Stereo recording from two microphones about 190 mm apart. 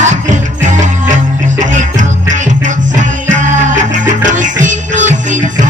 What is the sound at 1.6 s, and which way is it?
Music, 40° right (ahead or behind).